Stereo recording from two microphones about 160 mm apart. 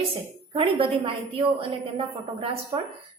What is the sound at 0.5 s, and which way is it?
A woman's voice, 35° right (ahead or behind).